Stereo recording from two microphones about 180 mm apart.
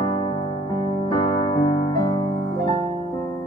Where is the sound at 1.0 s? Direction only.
25° left (ahead or behind).